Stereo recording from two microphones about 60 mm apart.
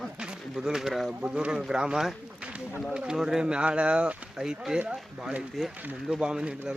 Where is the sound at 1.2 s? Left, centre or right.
Centre.